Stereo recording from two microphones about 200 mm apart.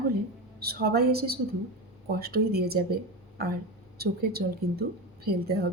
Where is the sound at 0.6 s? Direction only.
50° right (ahead or behind).